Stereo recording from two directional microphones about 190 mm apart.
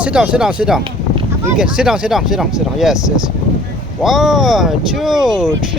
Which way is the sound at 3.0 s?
15° left (ahead or behind).